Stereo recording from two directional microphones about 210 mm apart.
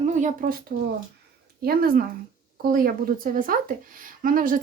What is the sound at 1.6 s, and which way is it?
Speech, 45° right (ahead or behind).